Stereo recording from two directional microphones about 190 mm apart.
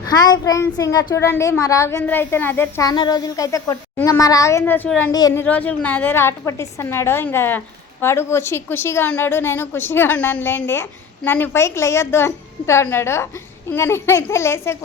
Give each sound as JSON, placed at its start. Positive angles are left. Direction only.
{"t": 0.1, "sound": "a woman's voice", "side_deg": 20}